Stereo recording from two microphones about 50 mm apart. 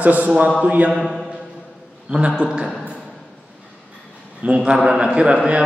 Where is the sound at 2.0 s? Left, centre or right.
Right.